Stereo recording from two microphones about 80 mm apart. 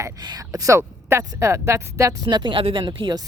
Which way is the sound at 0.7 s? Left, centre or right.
Right.